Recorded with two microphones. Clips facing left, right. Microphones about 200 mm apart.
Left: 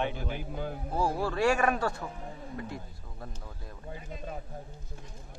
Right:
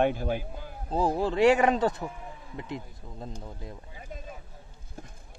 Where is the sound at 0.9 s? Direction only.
20° right (ahead or behind).